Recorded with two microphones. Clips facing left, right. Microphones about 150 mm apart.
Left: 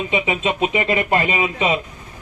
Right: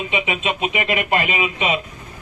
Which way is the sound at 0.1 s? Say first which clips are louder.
Left 2 dB; 30° left (ahead or behind).